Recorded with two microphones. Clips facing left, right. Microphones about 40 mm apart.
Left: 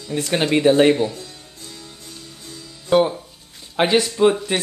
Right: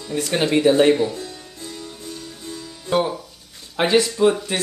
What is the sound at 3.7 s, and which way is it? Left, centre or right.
Speech, centre.